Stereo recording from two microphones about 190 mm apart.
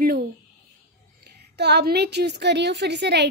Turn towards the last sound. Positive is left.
turn(degrees=-65)  # may be behind; listen again after turning